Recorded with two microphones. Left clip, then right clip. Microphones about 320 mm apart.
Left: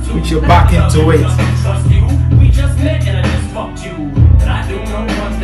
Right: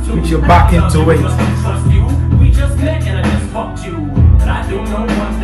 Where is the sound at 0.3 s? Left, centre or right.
Centre.